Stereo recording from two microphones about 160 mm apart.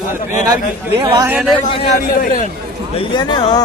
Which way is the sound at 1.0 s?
20° right (ahead or behind).